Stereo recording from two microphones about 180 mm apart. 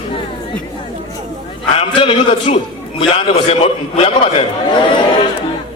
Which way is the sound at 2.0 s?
30° left (ahead or behind).